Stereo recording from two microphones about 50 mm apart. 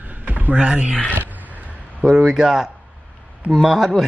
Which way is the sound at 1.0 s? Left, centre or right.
Left.